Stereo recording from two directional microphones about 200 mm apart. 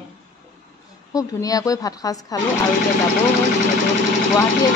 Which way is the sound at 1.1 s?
15° left (ahead or behind).